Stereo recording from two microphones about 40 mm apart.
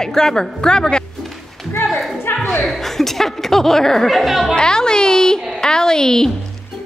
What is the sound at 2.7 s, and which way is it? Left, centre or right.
Speech, centre.